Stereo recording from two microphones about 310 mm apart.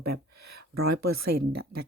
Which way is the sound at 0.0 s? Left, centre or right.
Right.